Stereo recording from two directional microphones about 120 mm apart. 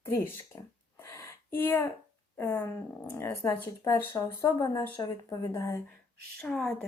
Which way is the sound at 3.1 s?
25° left (ahead or behind).